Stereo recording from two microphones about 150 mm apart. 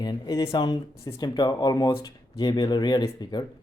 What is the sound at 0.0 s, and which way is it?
Speech, 25° left (ahead or behind).